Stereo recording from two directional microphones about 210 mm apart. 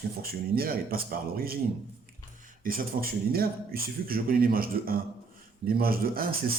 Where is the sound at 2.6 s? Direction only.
45° right (ahead or behind).